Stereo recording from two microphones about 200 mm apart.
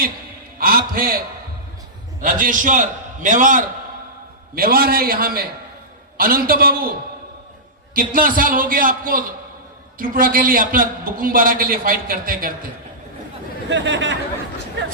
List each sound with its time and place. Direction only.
0.6 s a man's voice: 45° right (ahead or behind)
2.2 s a man's voice: 40° right (ahead or behind)
7.9 s a man's voice: 45° right (ahead or behind)
13.7 s speech: 65° right (ahead or behind)